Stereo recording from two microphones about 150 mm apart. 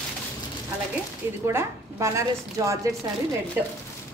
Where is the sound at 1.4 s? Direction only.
20° right (ahead or behind).